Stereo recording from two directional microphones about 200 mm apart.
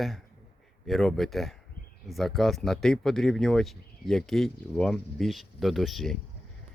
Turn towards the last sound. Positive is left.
turn(degrees=0)  # may be behind; listen again after turning